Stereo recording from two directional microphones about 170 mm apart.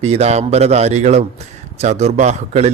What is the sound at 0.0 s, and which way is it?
Speech, 40° right (ahead or behind).